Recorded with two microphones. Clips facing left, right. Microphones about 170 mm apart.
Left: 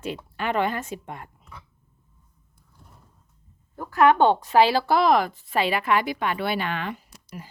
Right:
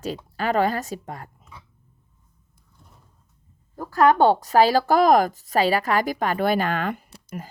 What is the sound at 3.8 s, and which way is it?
A woman's voice, 35° right (ahead or behind).